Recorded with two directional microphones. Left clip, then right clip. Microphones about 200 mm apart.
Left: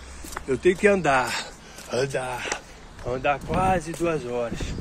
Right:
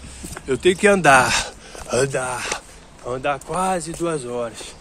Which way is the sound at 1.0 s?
55° right (ahead or behind).